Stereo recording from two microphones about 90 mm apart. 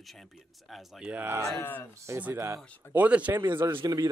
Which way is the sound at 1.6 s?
25° left (ahead or behind).